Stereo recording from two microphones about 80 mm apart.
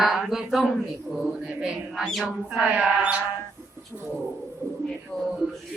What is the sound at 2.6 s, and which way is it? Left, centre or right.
Speech, centre.